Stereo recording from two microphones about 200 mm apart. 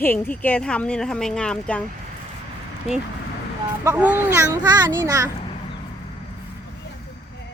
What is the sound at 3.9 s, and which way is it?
A child's voice, 10° right (ahead or behind).